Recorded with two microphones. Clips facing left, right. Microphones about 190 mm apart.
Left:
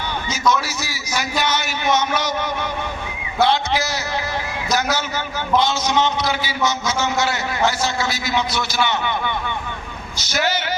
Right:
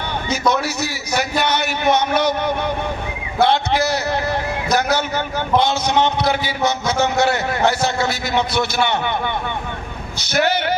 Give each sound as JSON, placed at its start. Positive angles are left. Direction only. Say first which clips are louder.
{"t": 0.3, "sound": "a man's voice", "louder": "right 2 dB", "side_deg": -60}